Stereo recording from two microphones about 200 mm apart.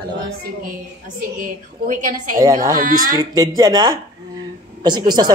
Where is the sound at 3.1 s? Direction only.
20° right (ahead or behind).